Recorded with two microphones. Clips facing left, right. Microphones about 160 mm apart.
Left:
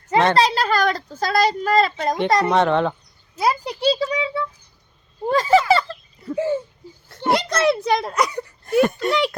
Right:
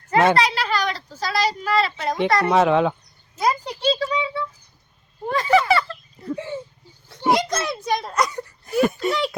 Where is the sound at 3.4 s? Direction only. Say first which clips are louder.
Left 2 dB; 10° left (ahead or behind).